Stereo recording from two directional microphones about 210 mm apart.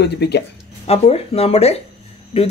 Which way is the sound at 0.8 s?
30° left (ahead or behind).